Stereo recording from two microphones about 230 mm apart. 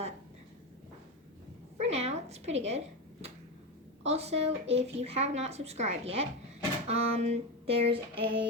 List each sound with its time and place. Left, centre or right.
1.8 s dog: right
4.0 s a woman's voice: right